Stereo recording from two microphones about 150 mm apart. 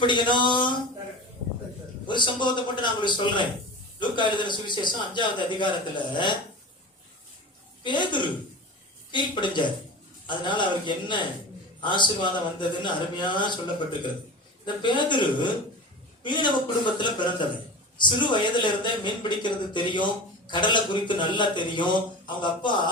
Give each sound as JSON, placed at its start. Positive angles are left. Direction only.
{"t": 0.0, "sound": "a man's voice", "side_deg": 30}
{"t": 2.0, "sound": "a man's voice", "side_deg": 30}
{"t": 7.9, "sound": "a man's voice", "side_deg": 30}
{"t": 14.6, "sound": "a man's voice", "side_deg": 30}